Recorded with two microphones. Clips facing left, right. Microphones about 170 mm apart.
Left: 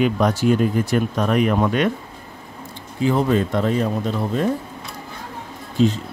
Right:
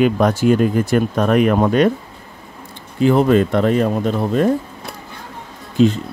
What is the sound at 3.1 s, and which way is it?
Speech, 70° right (ahead or behind).